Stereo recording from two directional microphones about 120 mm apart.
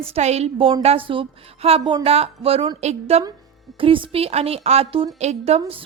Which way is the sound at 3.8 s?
45° right (ahead or behind).